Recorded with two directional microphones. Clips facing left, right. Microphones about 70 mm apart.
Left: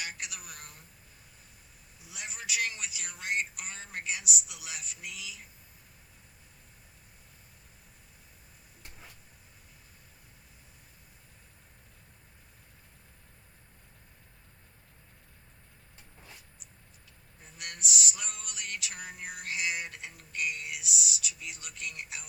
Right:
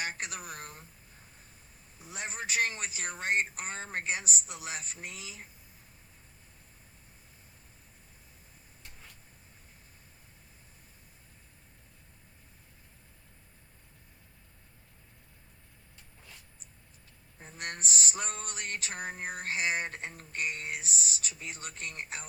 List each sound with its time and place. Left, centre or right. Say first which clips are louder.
0.0 s speech: right 4 dB; right
2.0 s speech: right 5 dB; right
17.4 s speech: right 3 dB; right